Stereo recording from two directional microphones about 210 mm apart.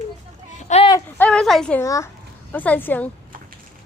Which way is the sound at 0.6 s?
30° left (ahead or behind).